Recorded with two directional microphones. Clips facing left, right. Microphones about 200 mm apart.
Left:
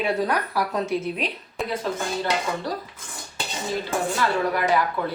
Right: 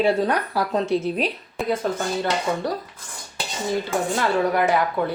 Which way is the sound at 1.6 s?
Centre (ahead or behind).